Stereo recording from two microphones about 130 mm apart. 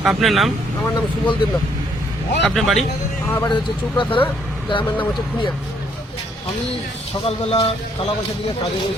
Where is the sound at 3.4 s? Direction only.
35° left (ahead or behind).